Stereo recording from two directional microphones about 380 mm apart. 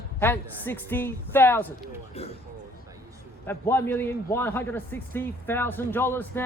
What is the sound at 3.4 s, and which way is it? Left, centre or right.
A man's voice, centre.